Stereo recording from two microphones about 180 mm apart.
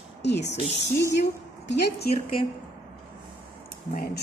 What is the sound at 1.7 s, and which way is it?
Speech, 65° left (ahead or behind).